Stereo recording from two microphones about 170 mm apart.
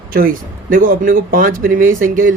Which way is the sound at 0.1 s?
55° right (ahead or behind).